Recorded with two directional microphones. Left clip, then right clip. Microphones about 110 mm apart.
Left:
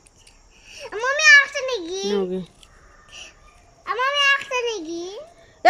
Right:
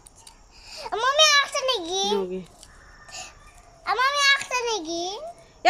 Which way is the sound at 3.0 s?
35° right (ahead or behind).